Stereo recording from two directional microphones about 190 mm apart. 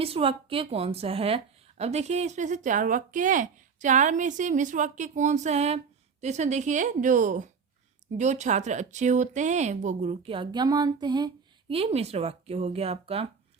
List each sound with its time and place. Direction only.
0.0 s speech: 30° right (ahead or behind)
11.0 s a sound: 20° right (ahead or behind)
11.7 s speech: 30° right (ahead or behind)